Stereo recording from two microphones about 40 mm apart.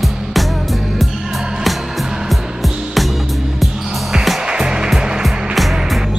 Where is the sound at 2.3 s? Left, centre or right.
Centre.